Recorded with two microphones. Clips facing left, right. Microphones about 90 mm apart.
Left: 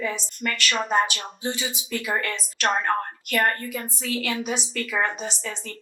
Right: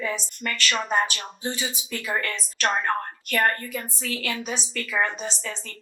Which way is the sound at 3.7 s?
25° left (ahead or behind).